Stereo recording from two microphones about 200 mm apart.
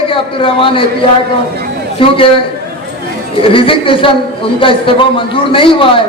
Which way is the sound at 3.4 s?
25° left (ahead or behind).